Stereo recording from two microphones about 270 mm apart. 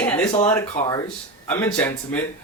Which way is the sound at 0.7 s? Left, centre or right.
Centre.